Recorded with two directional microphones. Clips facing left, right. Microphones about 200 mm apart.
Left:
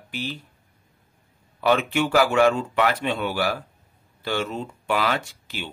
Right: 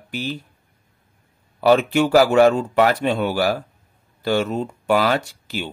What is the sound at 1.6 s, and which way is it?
Speech, 40° right (ahead or behind).